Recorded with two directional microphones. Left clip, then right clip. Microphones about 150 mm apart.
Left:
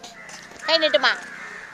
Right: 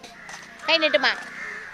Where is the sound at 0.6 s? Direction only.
30° right (ahead or behind).